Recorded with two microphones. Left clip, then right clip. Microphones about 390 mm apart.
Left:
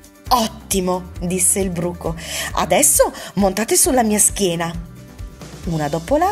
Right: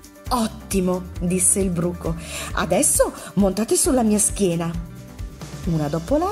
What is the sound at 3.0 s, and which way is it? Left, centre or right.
Speech, left.